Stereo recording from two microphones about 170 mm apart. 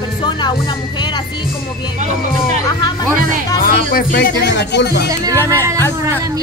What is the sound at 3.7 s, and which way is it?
Speech, 60° left (ahead or behind).